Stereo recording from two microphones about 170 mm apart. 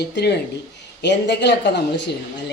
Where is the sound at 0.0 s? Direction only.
80° left.